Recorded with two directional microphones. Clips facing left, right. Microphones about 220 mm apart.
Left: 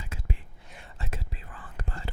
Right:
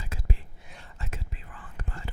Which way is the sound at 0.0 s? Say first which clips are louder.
Right 1 dB; 40° right (ahead or behind).